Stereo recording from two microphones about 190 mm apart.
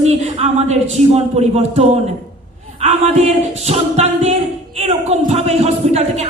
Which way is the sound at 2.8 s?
35° right (ahead or behind).